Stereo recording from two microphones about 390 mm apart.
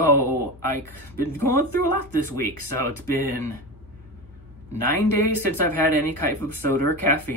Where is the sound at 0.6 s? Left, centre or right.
Left.